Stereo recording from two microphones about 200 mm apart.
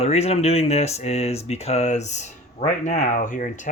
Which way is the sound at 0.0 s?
30° left (ahead or behind).